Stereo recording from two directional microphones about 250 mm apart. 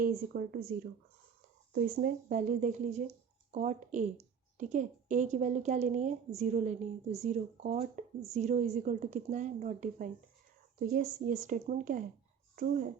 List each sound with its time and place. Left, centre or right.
0.0 s a woman's voice: right